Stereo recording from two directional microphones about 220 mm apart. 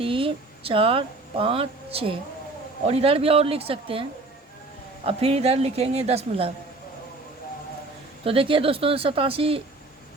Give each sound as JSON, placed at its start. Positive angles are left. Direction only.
{"t": 0.0, "sound": "a woman's voice", "side_deg": -25}
{"t": 5.0, "sound": "a woman's voice", "side_deg": -25}
{"t": 8.2, "sound": "a woman's voice", "side_deg": -25}